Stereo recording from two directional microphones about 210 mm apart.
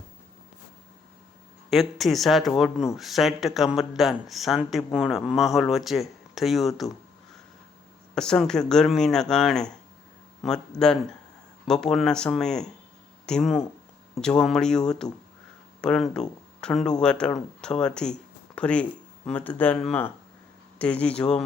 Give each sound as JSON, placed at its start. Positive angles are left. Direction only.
{"t": 1.7, "sound": "speech", "side_deg": 0}
{"t": 8.1, "sound": "speech", "side_deg": 5}